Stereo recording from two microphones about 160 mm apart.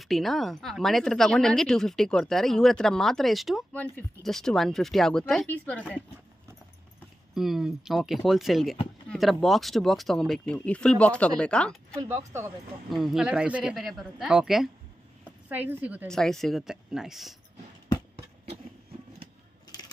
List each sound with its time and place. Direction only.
0.0 s a woman's voice: centre (ahead or behind)
3.7 s a woman's voice: 10° left (ahead or behind)
7.3 s a woman's voice: centre (ahead or behind)
12.0 s speech: 20° right (ahead or behind)
12.9 s a woman's voice: centre (ahead or behind)
16.1 s a woman's voice: 5° left (ahead or behind)